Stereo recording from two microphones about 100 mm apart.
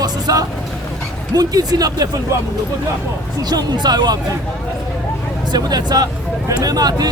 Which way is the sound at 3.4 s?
40° right (ahead or behind).